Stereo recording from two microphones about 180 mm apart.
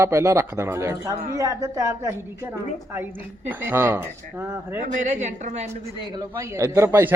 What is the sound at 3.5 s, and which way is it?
A woman's voice, 10° right (ahead or behind).